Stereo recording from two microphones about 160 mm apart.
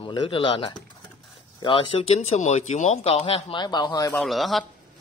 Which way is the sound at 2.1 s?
45° left (ahead or behind).